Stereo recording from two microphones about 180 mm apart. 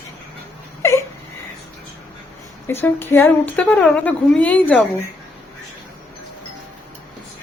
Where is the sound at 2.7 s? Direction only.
10° left (ahead or behind).